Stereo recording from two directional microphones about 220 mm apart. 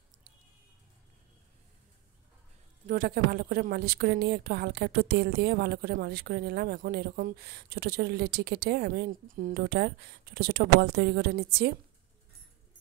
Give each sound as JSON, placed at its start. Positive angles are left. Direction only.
{"t": 2.9, "sound": "a woman's voice", "side_deg": -45}